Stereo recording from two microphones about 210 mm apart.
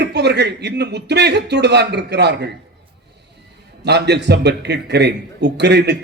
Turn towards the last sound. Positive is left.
turn(degrees=-55)  # may be behind; listen again after turning